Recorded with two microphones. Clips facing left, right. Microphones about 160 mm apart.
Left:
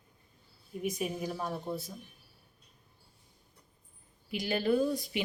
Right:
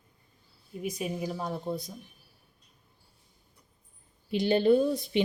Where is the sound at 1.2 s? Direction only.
15° right (ahead or behind).